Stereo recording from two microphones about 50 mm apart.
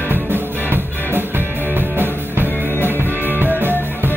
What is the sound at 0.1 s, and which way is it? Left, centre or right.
Music, right.